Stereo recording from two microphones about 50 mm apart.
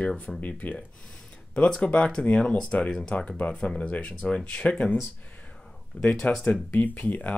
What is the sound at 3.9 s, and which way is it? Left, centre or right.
Speech, left.